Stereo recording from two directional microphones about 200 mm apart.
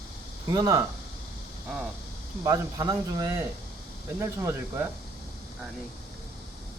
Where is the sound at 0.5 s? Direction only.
20° right (ahead or behind).